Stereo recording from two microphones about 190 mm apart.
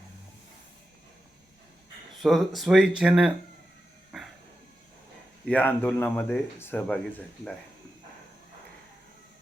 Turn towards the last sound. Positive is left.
turn(degrees=5)  # may be behind; listen again after turning